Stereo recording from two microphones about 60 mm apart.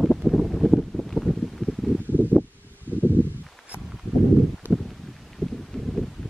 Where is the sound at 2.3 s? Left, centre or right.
Right.